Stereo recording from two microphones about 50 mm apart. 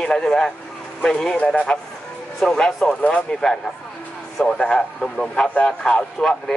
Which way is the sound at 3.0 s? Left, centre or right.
Left.